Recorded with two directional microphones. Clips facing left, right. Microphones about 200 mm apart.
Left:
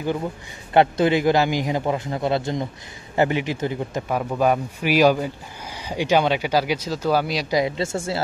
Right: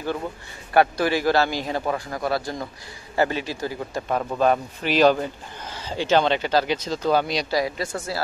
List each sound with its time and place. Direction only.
0.7 s a man's voice: 20° left (ahead or behind)
4.1 s speech: 5° left (ahead or behind)
7.5 s a man's voice: 25° left (ahead or behind)